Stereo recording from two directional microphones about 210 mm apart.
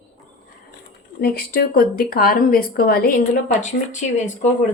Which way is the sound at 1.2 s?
50° left (ahead or behind).